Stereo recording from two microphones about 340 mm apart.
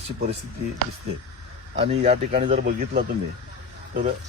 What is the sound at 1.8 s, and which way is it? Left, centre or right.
Speech, centre.